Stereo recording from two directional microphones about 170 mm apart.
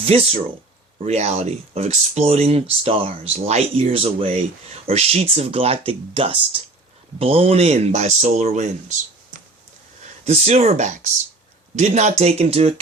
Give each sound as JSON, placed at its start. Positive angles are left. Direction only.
{"t": 0.0, "sound": "speech", "side_deg": -35}
{"t": 10.0, "sound": "speech", "side_deg": -40}